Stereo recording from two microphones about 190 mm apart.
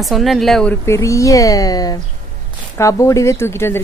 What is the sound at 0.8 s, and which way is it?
Speech, 15° left (ahead or behind).